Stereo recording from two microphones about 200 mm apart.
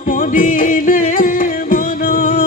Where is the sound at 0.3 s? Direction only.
45° left (ahead or behind).